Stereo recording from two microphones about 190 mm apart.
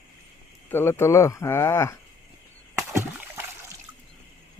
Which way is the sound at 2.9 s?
15° right (ahead or behind).